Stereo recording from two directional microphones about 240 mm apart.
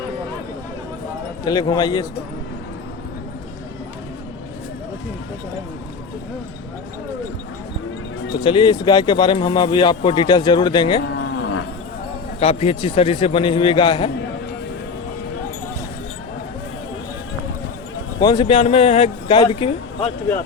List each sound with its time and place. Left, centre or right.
1.5 s a man's voice: centre
8.4 s speech: left
11.1 s livestock: left
12.4 s speech: left
18.2 s speech: centre